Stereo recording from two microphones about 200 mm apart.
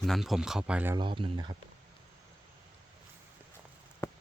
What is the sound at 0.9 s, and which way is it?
Speech, 25° right (ahead or behind).